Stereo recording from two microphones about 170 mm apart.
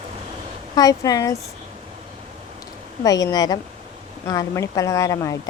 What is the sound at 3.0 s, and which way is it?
Speech, 20° left (ahead or behind).